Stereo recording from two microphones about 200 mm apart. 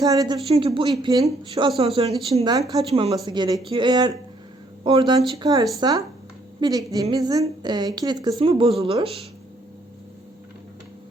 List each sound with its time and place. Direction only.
0.0 s speech: 15° right (ahead or behind)
0.4 s speech: 25° right (ahead or behind)